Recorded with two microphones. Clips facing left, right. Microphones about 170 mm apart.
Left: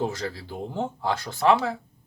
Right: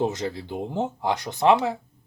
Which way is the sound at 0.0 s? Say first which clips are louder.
Right 3 dB; 20° right (ahead or behind).